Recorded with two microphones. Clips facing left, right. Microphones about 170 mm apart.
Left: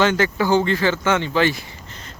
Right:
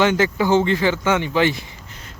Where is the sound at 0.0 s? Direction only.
15° right (ahead or behind).